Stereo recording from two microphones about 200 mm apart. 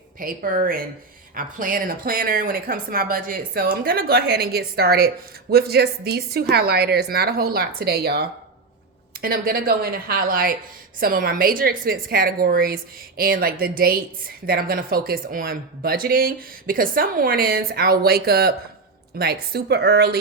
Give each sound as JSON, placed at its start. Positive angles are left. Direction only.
{"t": 0.2, "sound": "a woman's voice", "side_deg": -45}